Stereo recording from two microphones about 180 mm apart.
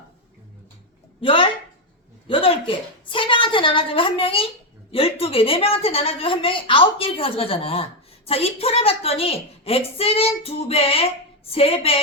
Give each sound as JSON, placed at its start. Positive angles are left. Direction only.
{"t": 1.2, "sound": "a woman's voice", "side_deg": 30}